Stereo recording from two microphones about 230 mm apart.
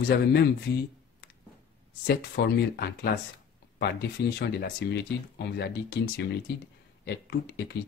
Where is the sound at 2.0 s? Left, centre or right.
Left.